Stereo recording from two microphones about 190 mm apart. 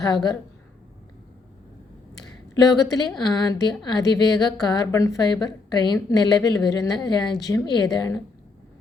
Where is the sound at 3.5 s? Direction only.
20° left (ahead or behind).